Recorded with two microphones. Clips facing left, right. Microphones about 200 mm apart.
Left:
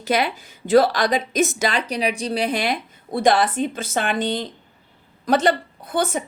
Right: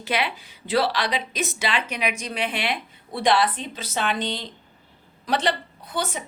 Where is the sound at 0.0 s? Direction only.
40° left (ahead or behind).